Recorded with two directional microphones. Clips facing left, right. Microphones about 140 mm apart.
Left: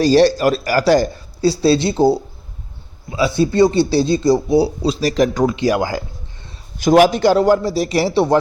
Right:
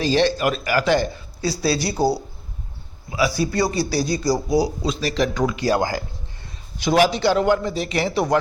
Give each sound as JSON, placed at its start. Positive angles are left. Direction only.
{"t": 0.0, "sound": "speech", "side_deg": 40}
{"t": 6.7, "sound": "speech", "side_deg": 45}